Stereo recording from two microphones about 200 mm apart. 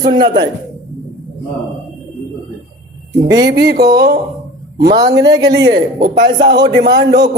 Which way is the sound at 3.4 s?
55° right (ahead or behind).